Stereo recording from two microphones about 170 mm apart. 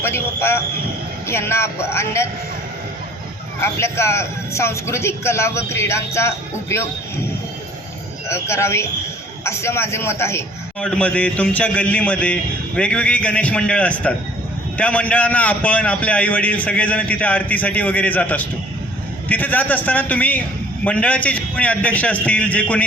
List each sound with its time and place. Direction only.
0.0 s a man's voice: 15° left (ahead or behind)
3.6 s a man's voice: 15° left (ahead or behind)
8.3 s a man's voice: 15° left (ahead or behind)